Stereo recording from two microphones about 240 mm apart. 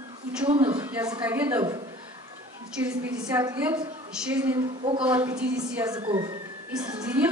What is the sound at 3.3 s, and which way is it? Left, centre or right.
A woman's voice, centre.